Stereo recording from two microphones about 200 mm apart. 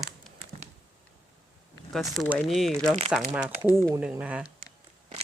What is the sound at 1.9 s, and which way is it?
Speech, centre (ahead or behind).